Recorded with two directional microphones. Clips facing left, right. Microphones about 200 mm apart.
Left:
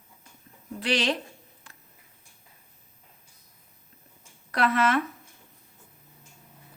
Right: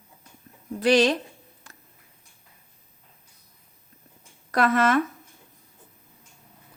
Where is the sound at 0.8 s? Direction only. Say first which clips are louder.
Right 8 dB; 40° right (ahead or behind).